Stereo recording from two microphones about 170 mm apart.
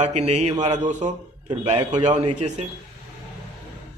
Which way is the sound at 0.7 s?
45° right (ahead or behind).